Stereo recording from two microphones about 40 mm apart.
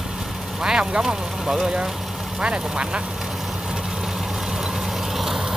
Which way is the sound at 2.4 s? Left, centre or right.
Right.